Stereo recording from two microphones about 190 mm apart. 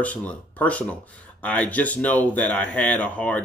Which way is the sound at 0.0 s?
10° left (ahead or behind).